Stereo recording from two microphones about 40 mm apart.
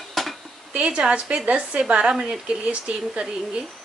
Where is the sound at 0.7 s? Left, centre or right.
Right.